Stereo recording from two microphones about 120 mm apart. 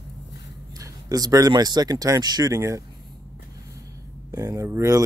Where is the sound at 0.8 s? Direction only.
30° right (ahead or behind).